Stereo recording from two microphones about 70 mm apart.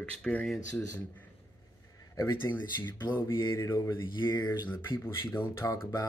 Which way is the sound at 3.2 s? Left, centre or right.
Left.